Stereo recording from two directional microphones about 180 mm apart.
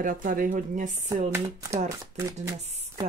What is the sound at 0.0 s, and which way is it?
Speech, 50° right (ahead or behind).